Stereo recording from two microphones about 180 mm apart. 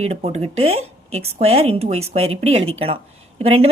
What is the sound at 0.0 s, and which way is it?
Speech, 35° right (ahead or behind).